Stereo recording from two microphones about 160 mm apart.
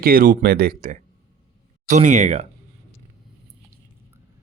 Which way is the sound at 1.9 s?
50° right (ahead or behind).